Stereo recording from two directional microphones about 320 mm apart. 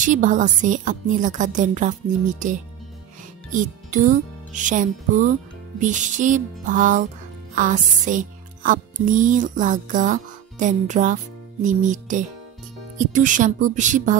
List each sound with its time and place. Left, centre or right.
0.0 s a woman's voice: right
7.5 s music: right
11.6 s a woman's voice: right